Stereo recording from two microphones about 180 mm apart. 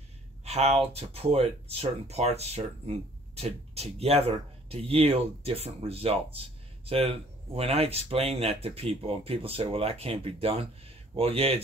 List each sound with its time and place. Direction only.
0.5 s speech: 35° right (ahead or behind)